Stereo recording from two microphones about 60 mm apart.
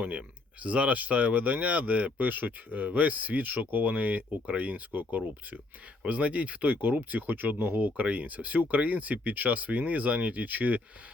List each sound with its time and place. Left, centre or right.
0.6 s speech: right